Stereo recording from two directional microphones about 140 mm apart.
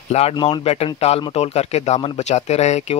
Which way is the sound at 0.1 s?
50° left (ahead or behind).